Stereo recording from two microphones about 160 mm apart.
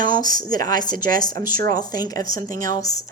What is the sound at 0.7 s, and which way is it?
Speech, 25° left (ahead or behind).